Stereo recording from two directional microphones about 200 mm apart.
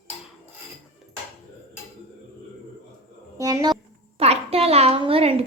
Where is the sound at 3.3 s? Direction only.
15° right (ahead or behind).